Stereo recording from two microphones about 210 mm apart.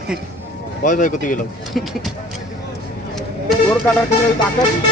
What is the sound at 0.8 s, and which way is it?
Speech, 35° left (ahead or behind).